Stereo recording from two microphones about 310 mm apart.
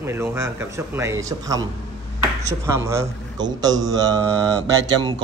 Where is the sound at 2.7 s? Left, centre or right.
Centre.